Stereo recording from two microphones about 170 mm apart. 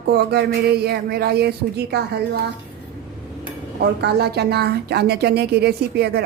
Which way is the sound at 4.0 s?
75° right (ahead or behind).